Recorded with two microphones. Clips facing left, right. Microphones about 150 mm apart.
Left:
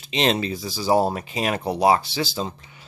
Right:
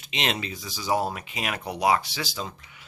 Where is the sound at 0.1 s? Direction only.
35° left (ahead or behind).